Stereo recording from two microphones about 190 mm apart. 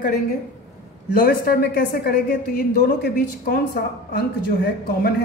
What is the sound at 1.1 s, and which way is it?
A woman's voice, 50° left (ahead or behind).